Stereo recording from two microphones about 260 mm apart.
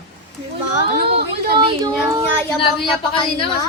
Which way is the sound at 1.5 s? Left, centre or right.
Centre.